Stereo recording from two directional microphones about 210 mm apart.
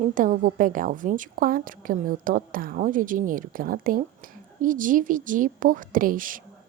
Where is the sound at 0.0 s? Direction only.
40° right (ahead or behind).